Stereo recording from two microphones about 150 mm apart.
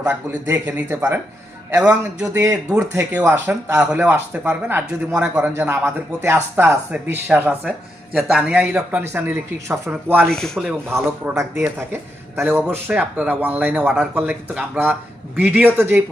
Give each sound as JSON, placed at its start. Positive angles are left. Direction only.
{"t": 0.0, "sound": "a man's voice", "side_deg": -15}
{"t": 10.2, "sound": "rub", "side_deg": 5}
{"t": 10.8, "sound": "speech", "side_deg": -15}